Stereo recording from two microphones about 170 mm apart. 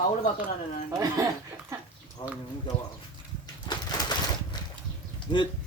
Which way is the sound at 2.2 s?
30° left (ahead or behind).